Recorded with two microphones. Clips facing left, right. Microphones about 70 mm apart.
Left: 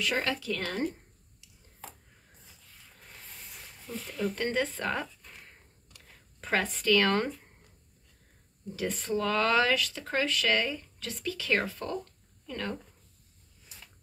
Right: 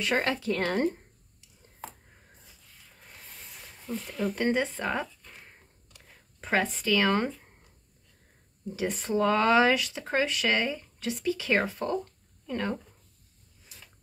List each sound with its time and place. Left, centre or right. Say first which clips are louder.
0.0 s speech: right 3 dB; right
4.2 s speech: right 3 dB; centre
5.5 s a sound: right 1 dB; centre
8.6 s speech: right 2 dB; centre